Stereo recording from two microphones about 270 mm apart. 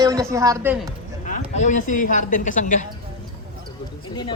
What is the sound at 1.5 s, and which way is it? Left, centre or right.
A woman's voice, left.